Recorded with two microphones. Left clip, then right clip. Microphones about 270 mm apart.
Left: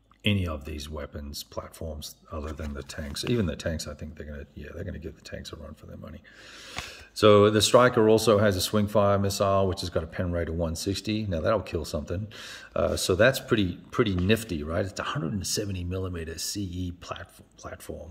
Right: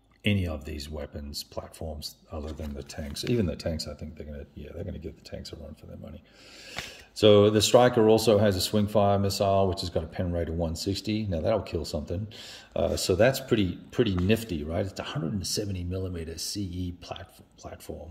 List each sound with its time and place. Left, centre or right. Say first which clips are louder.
0.2 s speech: left 1 dB; centre
1.3 s speech: even; left
2.3 s speech: left 3 dB; centre
6.7 s speech: even; centre